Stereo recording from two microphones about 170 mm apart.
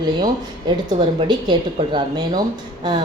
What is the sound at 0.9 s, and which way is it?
A woman's voice, 25° right (ahead or behind).